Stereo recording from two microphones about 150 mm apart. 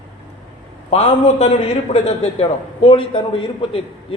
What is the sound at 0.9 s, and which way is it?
A man's voice, 45° left (ahead or behind).